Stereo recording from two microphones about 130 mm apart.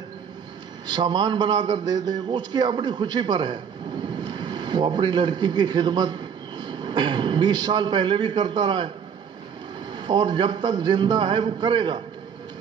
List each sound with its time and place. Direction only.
0.8 s a man's voice: 35° right (ahead or behind)
9.9 s a man's voice: 35° right (ahead or behind)